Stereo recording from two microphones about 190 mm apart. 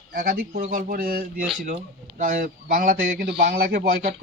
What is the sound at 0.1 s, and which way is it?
A man's voice, 50° right (ahead or behind).